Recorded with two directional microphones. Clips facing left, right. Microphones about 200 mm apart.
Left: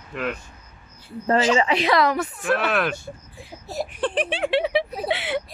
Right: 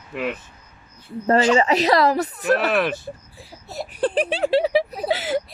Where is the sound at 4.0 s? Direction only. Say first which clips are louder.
Right 4 dB; 35° right (ahead or behind).